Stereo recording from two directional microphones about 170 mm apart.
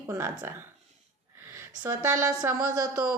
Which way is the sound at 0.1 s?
15° right (ahead or behind).